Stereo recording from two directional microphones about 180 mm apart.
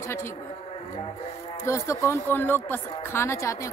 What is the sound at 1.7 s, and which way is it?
A woman's voice, 15° left (ahead or behind).